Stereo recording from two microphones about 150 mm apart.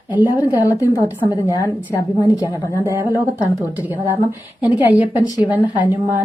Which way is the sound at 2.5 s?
20° right (ahead or behind).